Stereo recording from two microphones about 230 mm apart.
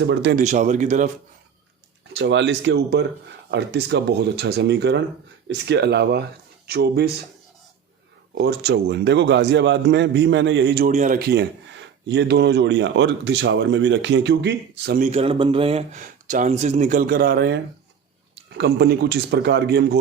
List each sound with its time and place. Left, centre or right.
0.0 s speech: right
0.4 s speech: right
2.1 s speech: right
8.4 s speech: right
10.9 s speech: right
15.0 s speech: right